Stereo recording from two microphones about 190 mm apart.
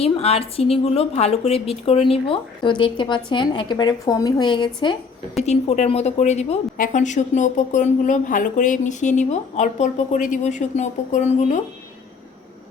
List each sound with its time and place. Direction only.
0.0 s a woman's voice: 30° left (ahead or behind)
5.4 s a woman's voice: 35° left (ahead or behind)